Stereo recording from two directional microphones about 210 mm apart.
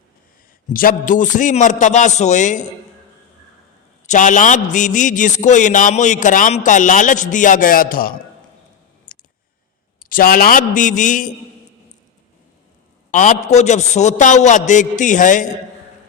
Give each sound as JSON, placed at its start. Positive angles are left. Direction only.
{"t": 0.7, "sound": "a man's voice", "side_deg": 40}
{"t": 4.0, "sound": "a man's voice", "side_deg": 35}
{"t": 9.1, "sound": "clicking", "side_deg": 45}
{"t": 10.1, "sound": "a man's voice", "side_deg": 40}
{"t": 13.1, "sound": "a man's voice", "side_deg": 35}